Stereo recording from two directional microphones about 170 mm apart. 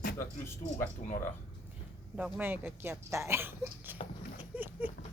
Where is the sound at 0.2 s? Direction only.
15° left (ahead or behind).